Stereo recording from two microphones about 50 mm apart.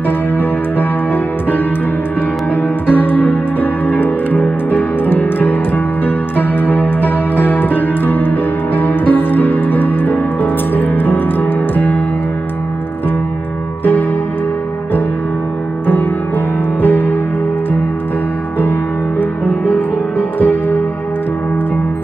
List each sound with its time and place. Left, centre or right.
0.4 s music: left
16.8 s music: left
18.6 s music: left